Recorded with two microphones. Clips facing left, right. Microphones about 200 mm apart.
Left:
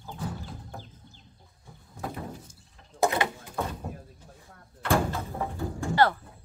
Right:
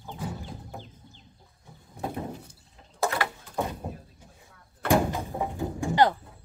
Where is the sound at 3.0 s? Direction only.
20° left (ahead or behind).